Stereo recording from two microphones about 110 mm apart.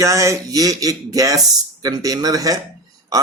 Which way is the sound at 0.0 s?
30° right (ahead or behind).